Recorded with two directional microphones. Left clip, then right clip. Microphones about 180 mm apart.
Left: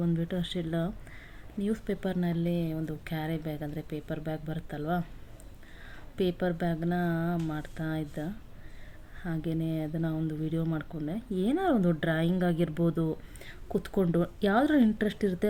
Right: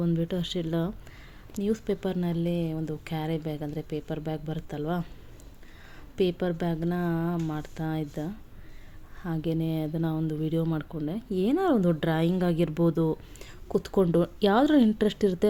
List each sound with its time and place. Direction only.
0.0 s speech: 30° right (ahead or behind)
6.1 s speech: 25° right (ahead or behind)